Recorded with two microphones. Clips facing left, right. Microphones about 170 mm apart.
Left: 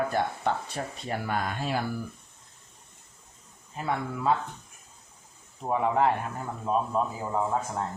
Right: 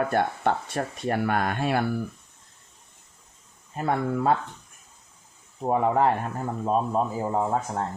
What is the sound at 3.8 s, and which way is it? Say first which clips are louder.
Speech: right 5 dB; 50° right (ahead or behind).